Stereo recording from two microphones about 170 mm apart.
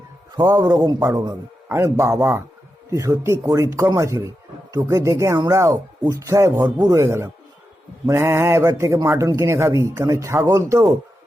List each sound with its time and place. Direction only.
0.3 s a man's voice: 20° right (ahead or behind)